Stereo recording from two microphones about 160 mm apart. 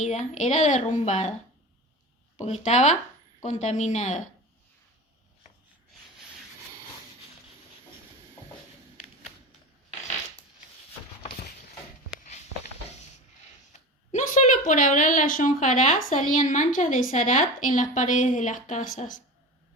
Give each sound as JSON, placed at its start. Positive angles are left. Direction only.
{"t": 0.0, "sound": "speech", "side_deg": 50}
{"t": 2.4, "sound": "speech", "side_deg": 45}
{"t": 13.7, "sound": "speech", "side_deg": 45}